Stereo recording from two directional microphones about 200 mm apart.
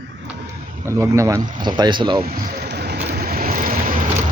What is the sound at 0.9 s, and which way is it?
Speech, 15° right (ahead or behind).